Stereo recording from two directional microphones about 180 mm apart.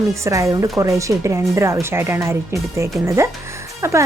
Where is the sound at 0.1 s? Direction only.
15° right (ahead or behind).